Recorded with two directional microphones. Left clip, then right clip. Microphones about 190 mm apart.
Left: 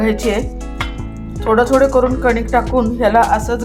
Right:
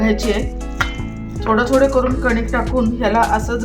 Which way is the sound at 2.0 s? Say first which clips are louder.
Left 3 dB; centre (ahead or behind).